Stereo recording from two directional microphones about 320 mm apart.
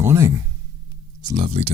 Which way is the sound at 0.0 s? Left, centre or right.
Centre.